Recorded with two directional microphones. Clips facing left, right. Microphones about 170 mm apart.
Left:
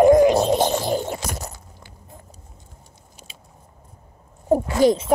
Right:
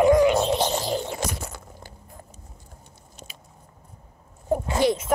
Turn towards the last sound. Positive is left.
turn(degrees=40)  # may be behind; listen again after turning